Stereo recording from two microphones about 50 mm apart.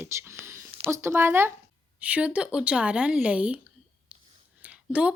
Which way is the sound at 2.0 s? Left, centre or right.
Right.